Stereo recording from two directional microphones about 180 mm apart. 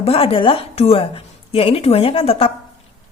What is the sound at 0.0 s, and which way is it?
A woman's voice, 35° left (ahead or behind).